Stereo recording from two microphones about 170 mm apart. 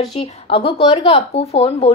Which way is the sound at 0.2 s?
35° left (ahead or behind).